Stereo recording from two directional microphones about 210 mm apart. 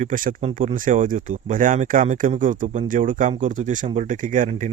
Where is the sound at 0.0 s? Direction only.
35° right (ahead or behind).